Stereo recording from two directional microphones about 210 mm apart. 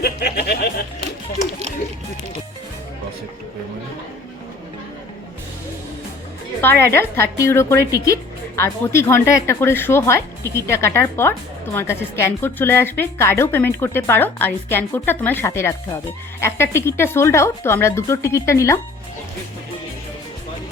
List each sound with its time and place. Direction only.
0.0 s music: 50° left (ahead or behind)
6.6 s a woman's voice: 10° left (ahead or behind)
7.8 s speech: 50° right (ahead or behind)
8.1 s a woman's voice: 10° left (ahead or behind)